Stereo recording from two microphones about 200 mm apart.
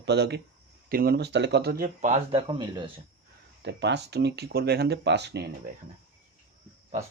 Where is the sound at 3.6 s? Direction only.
60° right (ahead or behind).